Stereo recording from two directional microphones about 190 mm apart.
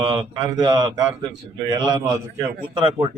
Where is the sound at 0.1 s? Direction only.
25° right (ahead or behind).